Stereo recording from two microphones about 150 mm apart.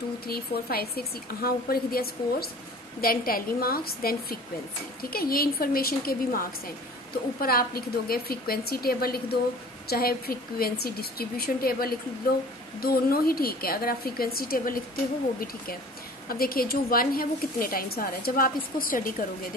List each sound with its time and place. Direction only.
0.3 s a woman's voice: 90° left
3.0 s a woman's voice: 75° left (ahead or behind)
16.3 s a woman's voice: 80° left